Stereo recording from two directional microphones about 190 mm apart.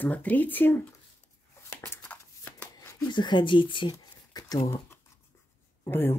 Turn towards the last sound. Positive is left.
turn(degrees=10)  # may be behind; listen again after turning